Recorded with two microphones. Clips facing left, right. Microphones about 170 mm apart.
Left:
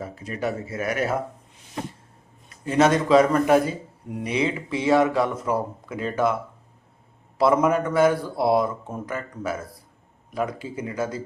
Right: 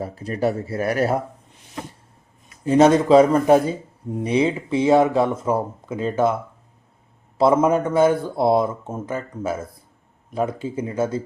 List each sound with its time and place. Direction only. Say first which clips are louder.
0.0 s speech: right 6 dB; 35° right (ahead or behind)
2.6 s speech: right 5 dB; 30° right (ahead or behind)
7.3 s speech: right 3 dB; 25° right (ahead or behind)